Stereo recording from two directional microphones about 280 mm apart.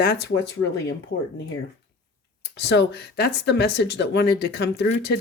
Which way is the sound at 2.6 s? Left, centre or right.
Left.